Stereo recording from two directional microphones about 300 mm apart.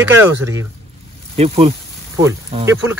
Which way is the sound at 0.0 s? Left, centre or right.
Centre.